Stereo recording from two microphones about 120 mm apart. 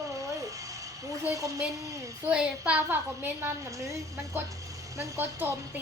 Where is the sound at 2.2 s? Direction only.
10° right (ahead or behind).